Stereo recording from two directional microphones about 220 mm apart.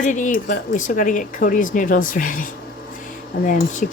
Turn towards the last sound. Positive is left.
turn(degrees=35)  # may be behind; listen again after turning